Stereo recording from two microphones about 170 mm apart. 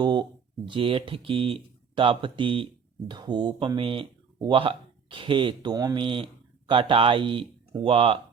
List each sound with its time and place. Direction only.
0.0 s speech: 25° right (ahead or behind)